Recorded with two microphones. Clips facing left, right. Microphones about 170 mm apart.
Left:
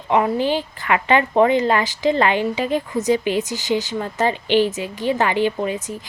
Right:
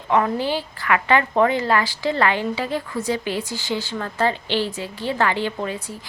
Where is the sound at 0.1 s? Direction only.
15° left (ahead or behind).